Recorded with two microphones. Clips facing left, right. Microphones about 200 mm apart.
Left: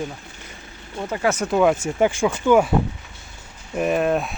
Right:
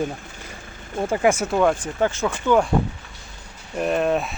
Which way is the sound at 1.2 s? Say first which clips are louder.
Right 2 dB; 10° right (ahead or behind).